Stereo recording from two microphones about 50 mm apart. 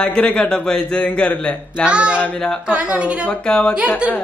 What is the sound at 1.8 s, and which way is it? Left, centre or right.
Speech, right.